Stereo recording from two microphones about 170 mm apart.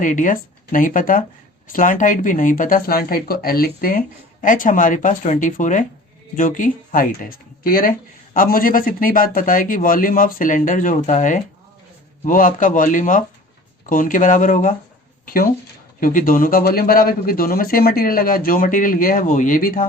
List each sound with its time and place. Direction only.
0.0 s speech: 50° left (ahead or behind)